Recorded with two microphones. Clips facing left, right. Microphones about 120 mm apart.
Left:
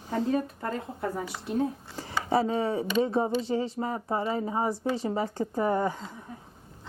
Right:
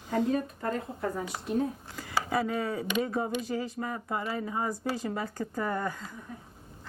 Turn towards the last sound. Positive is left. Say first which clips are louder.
# left 5 dB
turn(degrees=25)  # may be behind; listen again after turning